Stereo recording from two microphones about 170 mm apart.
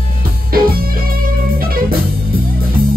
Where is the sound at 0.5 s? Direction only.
60° right (ahead or behind).